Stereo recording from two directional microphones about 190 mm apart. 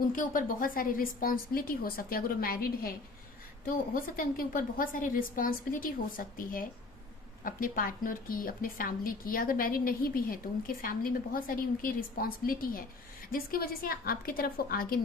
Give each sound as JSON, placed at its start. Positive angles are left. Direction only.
{"t": 0.1, "sound": "a woman's voice", "side_deg": 45}
{"t": 3.9, "sound": "a woman's voice", "side_deg": 45}